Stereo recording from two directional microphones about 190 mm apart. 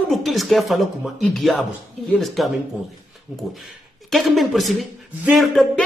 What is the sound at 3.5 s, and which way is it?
A man's voice, centre (ahead or behind).